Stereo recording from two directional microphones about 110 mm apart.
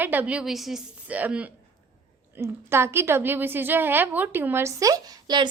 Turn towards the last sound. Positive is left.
turn(degrees=-40)  # may be behind; listen again after turning